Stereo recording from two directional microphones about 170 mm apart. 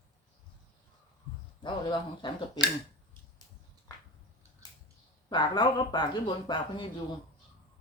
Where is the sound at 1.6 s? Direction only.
25° left (ahead or behind).